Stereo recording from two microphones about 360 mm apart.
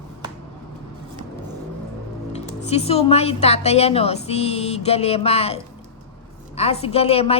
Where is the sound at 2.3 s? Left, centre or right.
Centre.